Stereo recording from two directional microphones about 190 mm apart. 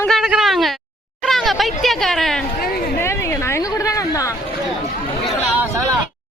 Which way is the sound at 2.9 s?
15° left (ahead or behind).